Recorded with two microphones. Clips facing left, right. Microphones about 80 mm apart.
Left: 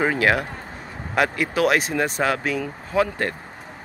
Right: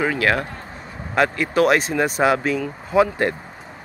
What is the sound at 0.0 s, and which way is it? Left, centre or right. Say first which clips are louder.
Speech: even; centre.